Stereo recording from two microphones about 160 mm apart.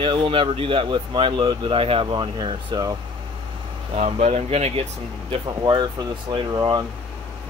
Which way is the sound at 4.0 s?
40° right (ahead or behind).